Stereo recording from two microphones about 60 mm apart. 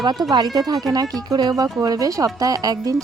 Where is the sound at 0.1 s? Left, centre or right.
Right.